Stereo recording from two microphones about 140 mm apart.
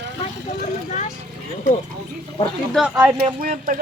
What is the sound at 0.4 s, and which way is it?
Vehicle, 55° left (ahead or behind).